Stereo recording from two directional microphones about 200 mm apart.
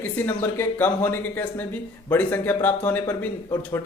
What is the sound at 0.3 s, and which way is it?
Speech, 10° left (ahead or behind).